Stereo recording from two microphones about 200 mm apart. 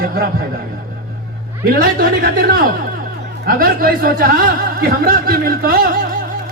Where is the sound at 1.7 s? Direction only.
45° right (ahead or behind).